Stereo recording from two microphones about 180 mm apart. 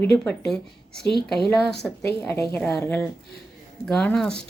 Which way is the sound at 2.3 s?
15° left (ahead or behind).